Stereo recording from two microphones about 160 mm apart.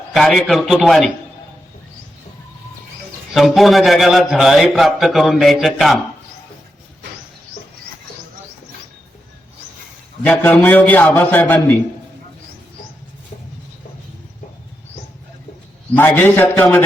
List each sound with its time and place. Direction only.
0.1 s a man's voice: centre (ahead or behind)
3.3 s a man's voice: centre (ahead or behind)
10.2 s a man's voice: 10° left (ahead or behind)
16.0 s a man's voice: 10° left (ahead or behind)